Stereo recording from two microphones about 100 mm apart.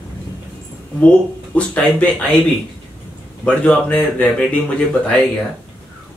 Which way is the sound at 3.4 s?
15° left (ahead or behind).